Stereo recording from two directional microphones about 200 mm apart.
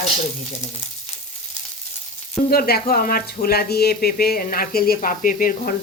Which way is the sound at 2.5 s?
50° left (ahead or behind).